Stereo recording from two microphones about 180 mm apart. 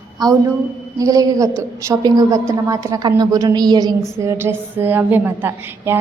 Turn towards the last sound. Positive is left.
turn(degrees=-10)  # may be behind; listen again after turning